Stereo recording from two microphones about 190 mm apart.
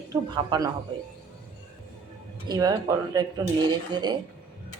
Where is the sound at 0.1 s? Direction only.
20° right (ahead or behind).